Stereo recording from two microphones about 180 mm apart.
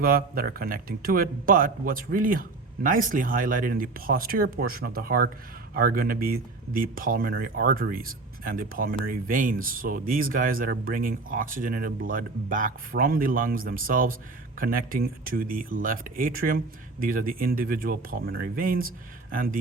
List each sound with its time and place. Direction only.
0.0 s speech: 55° right (ahead or behind)